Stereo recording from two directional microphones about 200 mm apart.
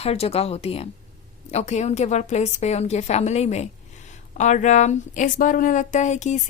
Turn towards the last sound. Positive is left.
turn(degrees=35)  # may be behind; listen again after turning